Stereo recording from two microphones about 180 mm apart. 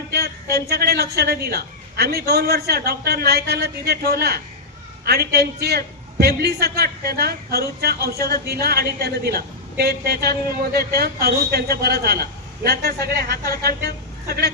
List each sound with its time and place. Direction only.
0.7 s a woman's voice: 60° right (ahead or behind)